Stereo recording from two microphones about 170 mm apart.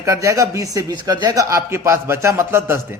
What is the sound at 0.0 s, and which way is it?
A man's voice, 20° right (ahead or behind).